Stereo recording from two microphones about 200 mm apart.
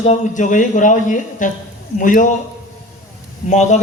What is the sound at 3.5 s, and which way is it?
Speech, 35° left (ahead or behind).